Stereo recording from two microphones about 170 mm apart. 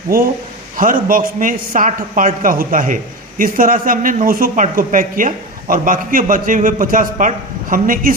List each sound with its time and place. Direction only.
0.8 s a man's voice: 55° right (ahead or behind)